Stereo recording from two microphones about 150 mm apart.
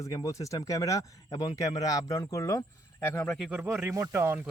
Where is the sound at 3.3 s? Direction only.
Centre (ahead or behind).